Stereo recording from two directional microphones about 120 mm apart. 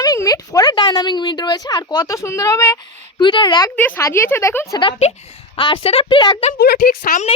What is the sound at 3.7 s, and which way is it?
Speech, 15° left (ahead or behind).